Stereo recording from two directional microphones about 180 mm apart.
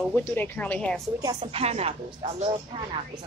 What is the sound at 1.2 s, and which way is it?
Speech, 30° right (ahead or behind).